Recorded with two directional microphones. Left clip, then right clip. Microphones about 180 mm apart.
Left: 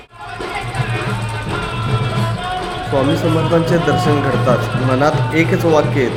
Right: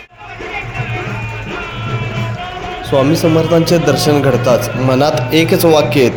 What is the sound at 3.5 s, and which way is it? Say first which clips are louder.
A man's voice: right 3 dB; 10° right (ahead or behind).